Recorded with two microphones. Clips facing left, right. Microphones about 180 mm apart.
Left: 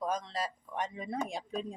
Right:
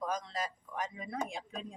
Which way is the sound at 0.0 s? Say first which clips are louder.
Left 2 dB; 30° left (ahead or behind).